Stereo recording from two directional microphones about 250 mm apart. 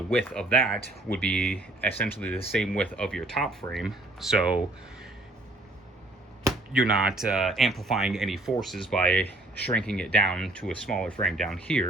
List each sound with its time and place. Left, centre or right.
0.1 s speech: centre
6.4 s speech: centre